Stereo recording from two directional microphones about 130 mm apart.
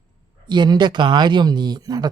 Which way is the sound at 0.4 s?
35° right (ahead or behind).